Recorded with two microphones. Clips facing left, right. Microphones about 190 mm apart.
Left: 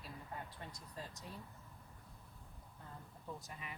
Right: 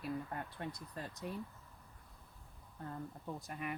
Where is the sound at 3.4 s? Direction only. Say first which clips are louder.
Right 9 dB; 55° right (ahead or behind).